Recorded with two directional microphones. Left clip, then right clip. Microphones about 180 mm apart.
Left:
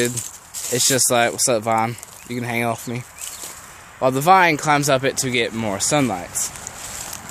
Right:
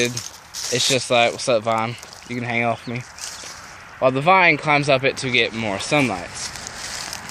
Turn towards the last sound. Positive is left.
turn(degrees=-50)  # may be behind; listen again after turning